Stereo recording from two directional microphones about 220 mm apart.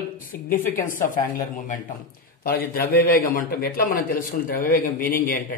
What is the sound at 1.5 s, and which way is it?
A man's voice, 35° left (ahead or behind).